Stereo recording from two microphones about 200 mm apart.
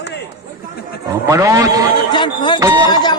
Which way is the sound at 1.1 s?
15° right (ahead or behind).